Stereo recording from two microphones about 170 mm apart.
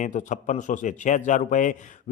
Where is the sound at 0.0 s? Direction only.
45° left (ahead or behind).